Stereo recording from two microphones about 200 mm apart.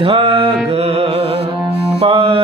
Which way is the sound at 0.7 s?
30° right (ahead or behind).